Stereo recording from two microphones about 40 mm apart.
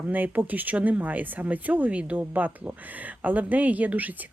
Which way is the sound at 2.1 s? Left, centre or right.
Right.